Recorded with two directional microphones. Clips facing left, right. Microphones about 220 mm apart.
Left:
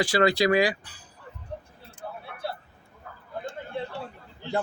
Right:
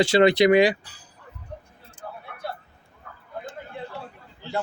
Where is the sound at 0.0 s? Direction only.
25° right (ahead or behind).